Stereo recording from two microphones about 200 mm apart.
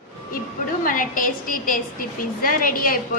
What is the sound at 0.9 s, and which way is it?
A woman's voice, 45° left (ahead or behind).